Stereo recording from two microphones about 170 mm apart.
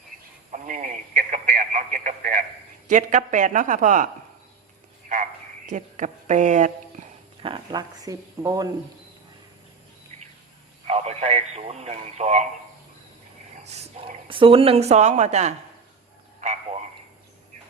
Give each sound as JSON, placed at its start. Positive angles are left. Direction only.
{"t": 0.5, "sound": "telephone", "side_deg": -55}
{"t": 2.8, "sound": "speech", "side_deg": -45}
{"t": 5.1, "sound": "a sound", "side_deg": -55}
{"t": 5.6, "sound": "speech", "side_deg": -45}
{"t": 7.4, "sound": "speech", "side_deg": -25}
{"t": 10.8, "sound": "speech", "side_deg": -40}
{"t": 13.7, "sound": "a woman's voice", "side_deg": -35}